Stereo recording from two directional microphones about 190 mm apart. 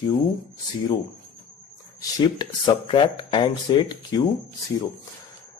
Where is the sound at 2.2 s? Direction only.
25° left (ahead or behind).